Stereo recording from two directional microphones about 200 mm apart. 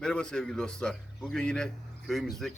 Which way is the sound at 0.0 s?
5° left (ahead or behind).